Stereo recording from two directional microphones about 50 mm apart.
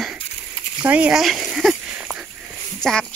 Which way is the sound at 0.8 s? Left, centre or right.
Right.